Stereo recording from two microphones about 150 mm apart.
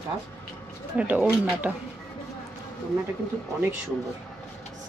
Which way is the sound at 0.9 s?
10° right (ahead or behind).